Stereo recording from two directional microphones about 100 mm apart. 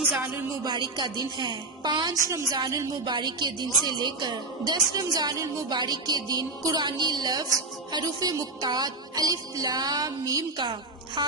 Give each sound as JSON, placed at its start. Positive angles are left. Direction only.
{"t": 0.6, "sound": "a woman's voice", "side_deg": -50}
{"t": 2.2, "sound": "music", "side_deg": -35}
{"t": 3.0, "sound": "a woman's voice", "side_deg": -50}
{"t": 7.9, "sound": "music", "side_deg": -40}
{"t": 10.6, "sound": "a woman's voice", "side_deg": -50}